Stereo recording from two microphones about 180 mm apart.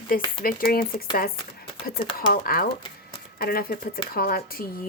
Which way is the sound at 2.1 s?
55° left (ahead or behind).